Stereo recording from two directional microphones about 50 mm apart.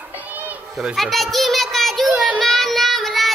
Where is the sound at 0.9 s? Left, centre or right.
Centre.